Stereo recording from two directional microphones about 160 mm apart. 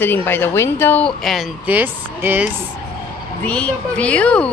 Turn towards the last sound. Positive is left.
turn(degrees=10)  # may be behind; listen again after turning